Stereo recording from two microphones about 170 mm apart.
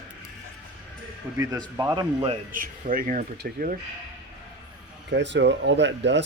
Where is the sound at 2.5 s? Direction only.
55° right (ahead or behind).